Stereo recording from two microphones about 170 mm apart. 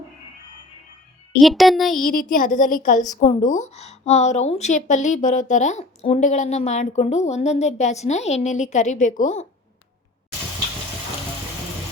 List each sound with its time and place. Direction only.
1.4 s a child's voice: centre (ahead or behind)
2.0 s a woman's voice: 55° left (ahead or behind)